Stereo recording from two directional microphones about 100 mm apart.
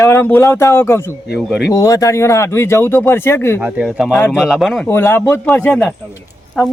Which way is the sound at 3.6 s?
10° right (ahead or behind).